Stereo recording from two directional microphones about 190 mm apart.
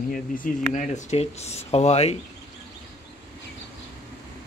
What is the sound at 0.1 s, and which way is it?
Speech, 45° left (ahead or behind).